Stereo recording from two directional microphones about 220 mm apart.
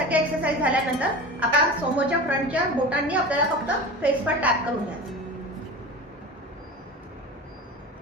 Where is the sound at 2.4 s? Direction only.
5° right (ahead or behind).